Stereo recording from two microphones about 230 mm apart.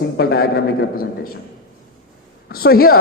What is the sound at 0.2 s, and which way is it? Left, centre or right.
A man's voice, left.